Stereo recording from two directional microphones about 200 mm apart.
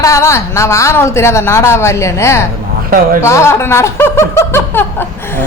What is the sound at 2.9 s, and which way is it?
Speech, 45° right (ahead or behind).